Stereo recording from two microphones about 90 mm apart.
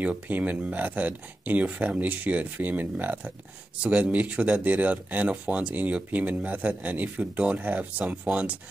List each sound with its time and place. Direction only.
0.0 s speech: 15° right (ahead or behind)